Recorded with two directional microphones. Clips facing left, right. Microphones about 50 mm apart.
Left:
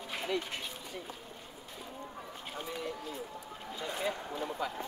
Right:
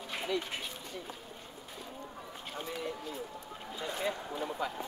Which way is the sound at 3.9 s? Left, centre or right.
Centre.